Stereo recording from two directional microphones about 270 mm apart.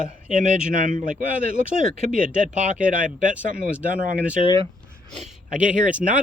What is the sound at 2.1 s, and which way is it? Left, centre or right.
Speech, centre.